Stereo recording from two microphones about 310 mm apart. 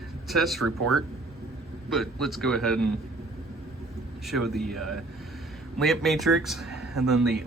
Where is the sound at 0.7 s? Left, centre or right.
Right.